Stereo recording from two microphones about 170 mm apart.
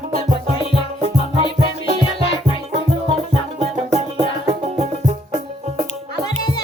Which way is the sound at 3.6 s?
35° right (ahead or behind).